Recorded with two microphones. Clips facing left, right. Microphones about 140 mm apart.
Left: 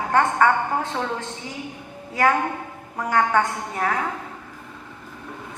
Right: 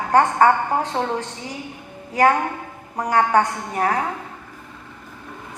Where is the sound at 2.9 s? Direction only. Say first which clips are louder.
Right 3 dB; 40° right (ahead or behind).